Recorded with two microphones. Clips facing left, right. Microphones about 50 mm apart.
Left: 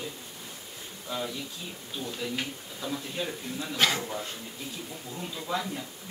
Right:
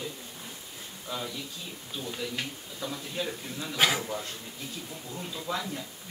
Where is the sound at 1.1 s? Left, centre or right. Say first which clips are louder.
Left 2 dB; centre.